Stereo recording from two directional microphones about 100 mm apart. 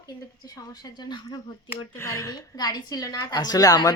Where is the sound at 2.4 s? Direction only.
40° left (ahead or behind).